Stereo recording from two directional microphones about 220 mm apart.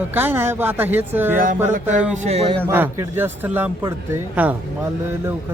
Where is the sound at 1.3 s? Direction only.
40° right (ahead or behind).